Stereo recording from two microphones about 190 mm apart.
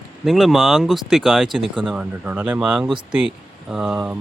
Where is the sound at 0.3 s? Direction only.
Centre (ahead or behind).